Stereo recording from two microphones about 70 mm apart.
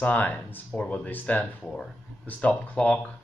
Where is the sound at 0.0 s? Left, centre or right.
Left.